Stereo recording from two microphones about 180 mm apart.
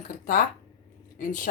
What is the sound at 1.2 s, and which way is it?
Speech, 50° left (ahead or behind).